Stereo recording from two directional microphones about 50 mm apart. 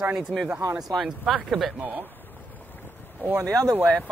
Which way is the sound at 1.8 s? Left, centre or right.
Right.